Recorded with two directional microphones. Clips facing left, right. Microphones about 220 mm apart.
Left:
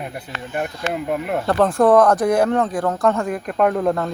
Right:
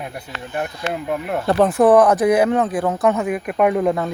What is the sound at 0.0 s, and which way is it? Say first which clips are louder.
Speech: left 1 dB; centre (ahead or behind).